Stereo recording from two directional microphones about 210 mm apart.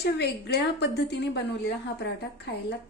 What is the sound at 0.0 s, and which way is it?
A woman's voice, 50° left (ahead or behind).